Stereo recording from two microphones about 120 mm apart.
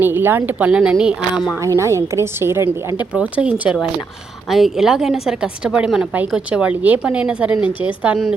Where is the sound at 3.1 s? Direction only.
10° right (ahead or behind).